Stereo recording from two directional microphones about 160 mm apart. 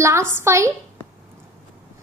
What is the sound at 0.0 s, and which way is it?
Speech, 15° right (ahead or behind).